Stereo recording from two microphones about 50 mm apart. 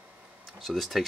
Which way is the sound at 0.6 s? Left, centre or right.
Centre.